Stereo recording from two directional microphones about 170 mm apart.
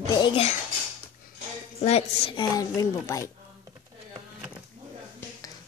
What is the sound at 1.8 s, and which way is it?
Speech, 40° left (ahead or behind).